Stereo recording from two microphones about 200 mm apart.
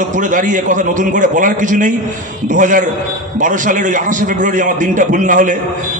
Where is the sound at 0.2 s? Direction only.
40° right (ahead or behind).